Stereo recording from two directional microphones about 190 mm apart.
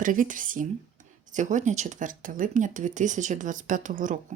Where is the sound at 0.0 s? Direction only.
45° right (ahead or behind).